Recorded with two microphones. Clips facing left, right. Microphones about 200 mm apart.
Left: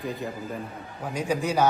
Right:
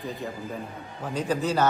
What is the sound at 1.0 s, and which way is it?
Speech, 10° left (ahead or behind).